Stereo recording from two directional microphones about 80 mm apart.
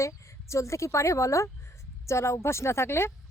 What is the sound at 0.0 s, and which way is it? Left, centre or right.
A woman's voice, left.